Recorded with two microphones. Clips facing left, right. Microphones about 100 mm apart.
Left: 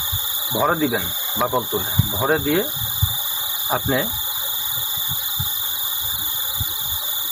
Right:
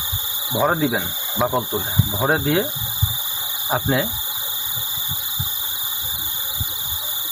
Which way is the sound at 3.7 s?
5° right (ahead or behind).